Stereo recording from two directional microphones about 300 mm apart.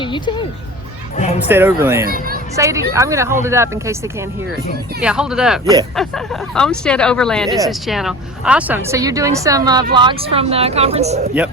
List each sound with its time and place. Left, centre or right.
0.0 s speech: centre
1.5 s a woman's voice: centre
4.9 s a woman's voice: centre; by 11.3 s right